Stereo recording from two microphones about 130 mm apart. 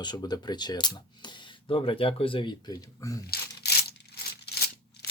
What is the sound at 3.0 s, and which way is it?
Speech, 25° left (ahead or behind).